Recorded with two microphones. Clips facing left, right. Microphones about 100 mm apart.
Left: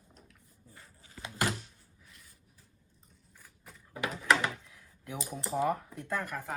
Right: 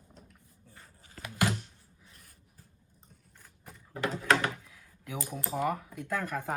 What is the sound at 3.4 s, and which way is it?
Shuffling cards, 5° left (ahead or behind).